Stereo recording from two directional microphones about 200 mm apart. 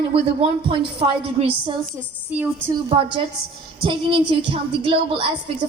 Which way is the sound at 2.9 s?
25° right (ahead or behind).